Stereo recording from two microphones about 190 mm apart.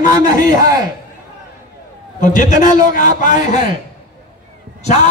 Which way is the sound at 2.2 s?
45° left (ahead or behind).